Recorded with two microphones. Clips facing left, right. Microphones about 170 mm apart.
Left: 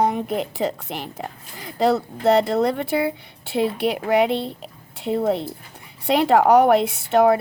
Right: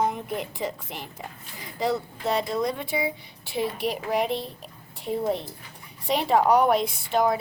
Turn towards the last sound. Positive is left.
turn(degrees=70)  # may be behind; listen again after turning